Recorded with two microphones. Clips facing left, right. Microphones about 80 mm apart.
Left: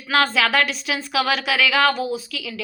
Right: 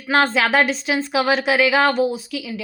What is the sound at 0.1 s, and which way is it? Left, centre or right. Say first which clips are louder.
Speech: right 2 dB; right.